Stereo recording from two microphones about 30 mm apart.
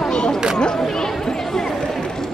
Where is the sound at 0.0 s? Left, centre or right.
Left.